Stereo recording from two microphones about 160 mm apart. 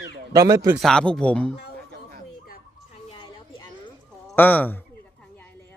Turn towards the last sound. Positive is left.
turn(degrees=10)  # may be behind; listen again after turning